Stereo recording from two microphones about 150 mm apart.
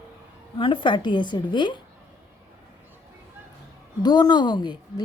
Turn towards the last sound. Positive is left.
turn(degrees=30)  # may be behind; listen again after turning